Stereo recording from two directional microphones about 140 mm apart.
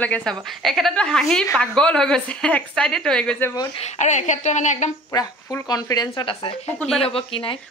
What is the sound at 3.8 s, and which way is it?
A woman's voice, 55° left (ahead or behind).